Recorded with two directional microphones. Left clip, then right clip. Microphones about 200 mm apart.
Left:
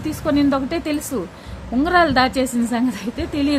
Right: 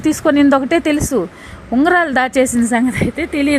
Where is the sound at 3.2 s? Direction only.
15° right (ahead or behind).